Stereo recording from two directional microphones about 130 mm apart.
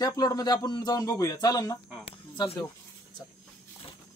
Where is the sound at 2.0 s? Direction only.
35° left (ahead or behind).